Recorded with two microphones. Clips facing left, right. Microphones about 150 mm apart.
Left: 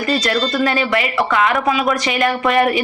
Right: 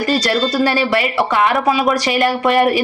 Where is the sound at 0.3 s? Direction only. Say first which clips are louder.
Right 1 dB; 40° right (ahead or behind).